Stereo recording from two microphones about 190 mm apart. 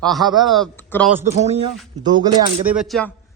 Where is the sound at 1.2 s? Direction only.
35° right (ahead or behind).